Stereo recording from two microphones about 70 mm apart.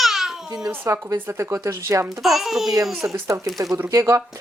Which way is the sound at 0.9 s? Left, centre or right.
Right.